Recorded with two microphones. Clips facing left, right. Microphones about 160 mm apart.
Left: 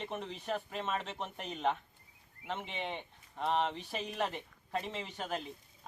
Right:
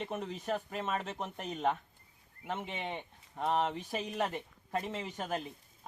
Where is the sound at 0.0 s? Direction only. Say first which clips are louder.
Right 2 dB; 5° right (ahead or behind).